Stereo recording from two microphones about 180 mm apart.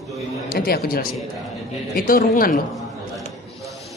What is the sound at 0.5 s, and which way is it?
Speech, 55° left (ahead or behind).